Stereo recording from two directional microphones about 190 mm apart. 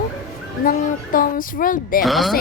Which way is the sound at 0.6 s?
45° left (ahead or behind).